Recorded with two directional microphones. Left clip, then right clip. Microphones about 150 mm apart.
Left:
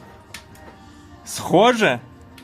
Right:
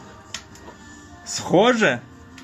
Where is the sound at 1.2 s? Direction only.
20° left (ahead or behind).